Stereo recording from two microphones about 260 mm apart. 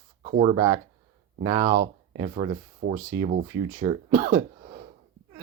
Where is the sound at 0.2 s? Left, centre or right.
Right.